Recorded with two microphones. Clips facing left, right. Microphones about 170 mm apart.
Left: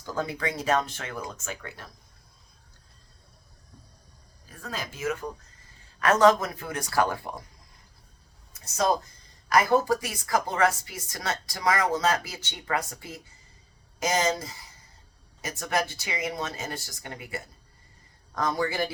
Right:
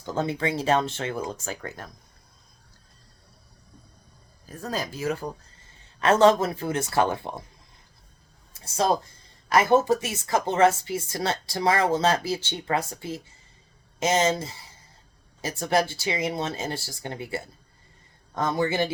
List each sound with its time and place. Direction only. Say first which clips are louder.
0.0 s speech: right 4 dB; 25° right (ahead or behind); by 1.9 s 45° right (ahead or behind)
4.4 s speech: right 6 dB; 40° right (ahead or behind); by 7.4 s 25° right (ahead or behind)
8.5 s a sound: right 2 dB; 30° right (ahead or behind)
9.5 s speech: right 2 dB; 25° right (ahead or behind)